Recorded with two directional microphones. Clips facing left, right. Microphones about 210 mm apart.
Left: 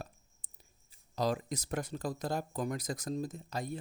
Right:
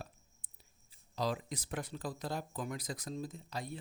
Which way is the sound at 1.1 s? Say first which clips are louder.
Left 4 dB; 45° left (ahead or behind).